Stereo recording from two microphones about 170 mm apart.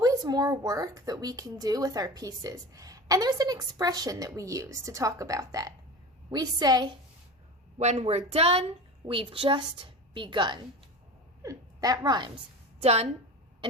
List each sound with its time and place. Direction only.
0.0 s speech: 20° right (ahead or behind)
7.8 s a woman's voice: 40° right (ahead or behind); by 12.3 s 25° right (ahead or behind)
12.8 s a woman's voice: 40° right (ahead or behind)